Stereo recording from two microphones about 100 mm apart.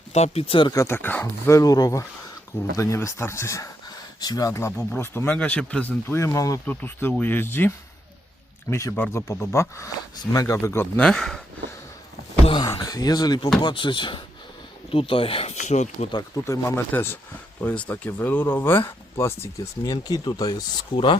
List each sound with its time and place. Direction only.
0.1 s speech: 90° left; by 0.7 s 65° left (ahead or behind)
0.7 s speech: 30° left (ahead or behind)
1.5 s speech: 35° left (ahead or behind)
3.8 s speech: 40° left (ahead or behind); by 5.9 s 10° left (ahead or behind)
6.1 s speech: 30° left (ahead or behind)
6.7 s speech: 20° left (ahead or behind)
8.7 s speech: 25° left (ahead or behind)
10.9 s speech: 5° left (ahead or behind)
12.5 s speech: 35° left (ahead or behind)
13.6 s speech: 50° left (ahead or behind); by 15.5 s 70° left (ahead or behind)
16.4 s speech: 30° left (ahead or behind)
19.8 s speech: 40° left (ahead or behind)
20.9 s speech: 60° left (ahead or behind)